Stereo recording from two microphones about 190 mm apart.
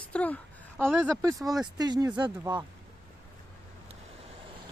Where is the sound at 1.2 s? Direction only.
15° right (ahead or behind).